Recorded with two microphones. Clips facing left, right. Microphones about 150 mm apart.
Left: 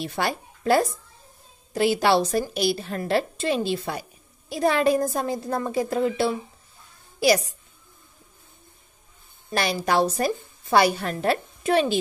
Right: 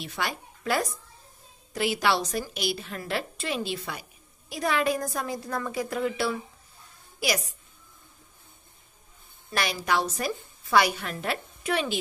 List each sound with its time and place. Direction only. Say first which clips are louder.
0.0 s a woman's voice: left 6 dB; 35° left (ahead or behind)
9.5 s a woman's voice: left 4 dB; 35° left (ahead or behind)